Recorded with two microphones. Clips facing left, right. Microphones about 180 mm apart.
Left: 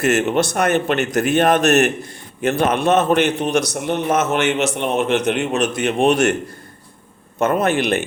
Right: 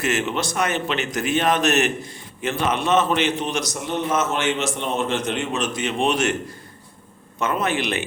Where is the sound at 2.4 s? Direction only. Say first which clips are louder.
Left 6 dB; 50° left (ahead or behind).